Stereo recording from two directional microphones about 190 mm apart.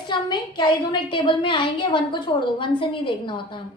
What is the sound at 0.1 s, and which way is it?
A woman's voice, 25° left (ahead or behind).